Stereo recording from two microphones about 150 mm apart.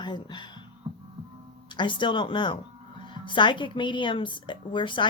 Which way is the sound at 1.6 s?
35° left (ahead or behind).